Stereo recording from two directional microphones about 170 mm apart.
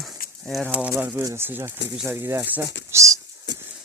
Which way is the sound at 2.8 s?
20° right (ahead or behind).